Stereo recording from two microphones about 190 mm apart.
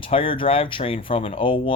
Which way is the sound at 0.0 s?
30° left (ahead or behind).